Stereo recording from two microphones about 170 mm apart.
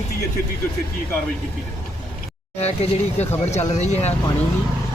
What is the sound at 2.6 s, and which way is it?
Speech, 40° left (ahead or behind).